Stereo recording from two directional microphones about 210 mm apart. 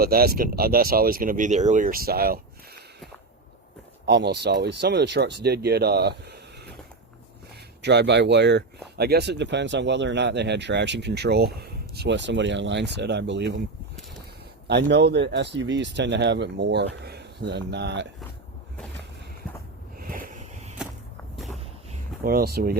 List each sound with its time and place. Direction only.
0.0 s speech: 45° right (ahead or behind)
4.0 s speech: 55° right (ahead or behind)
7.8 s speech: 55° right (ahead or behind)
14.7 s speech: 55° right (ahead or behind)
20.0 s a sound: 40° right (ahead or behind)
21.3 s walk: centre (ahead or behind)
22.2 s speech: 45° right (ahead or behind)